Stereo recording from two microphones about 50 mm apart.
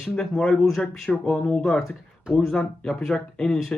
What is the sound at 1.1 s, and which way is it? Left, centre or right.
Speech, left.